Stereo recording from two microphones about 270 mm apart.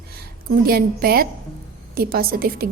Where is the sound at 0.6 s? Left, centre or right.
Right.